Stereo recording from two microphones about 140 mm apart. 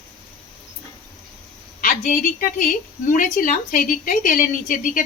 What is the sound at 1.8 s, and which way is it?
A woman's voice, 70° left (ahead or behind).